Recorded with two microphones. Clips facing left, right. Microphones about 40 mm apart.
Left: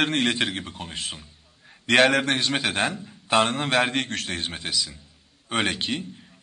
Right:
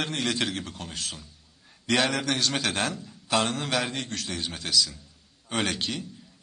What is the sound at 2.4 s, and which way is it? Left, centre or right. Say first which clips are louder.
A man's voice: left 3 dB; left.